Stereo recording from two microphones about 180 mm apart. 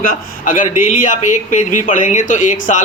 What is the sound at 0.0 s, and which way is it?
A man's voice, 50° left (ahead or behind).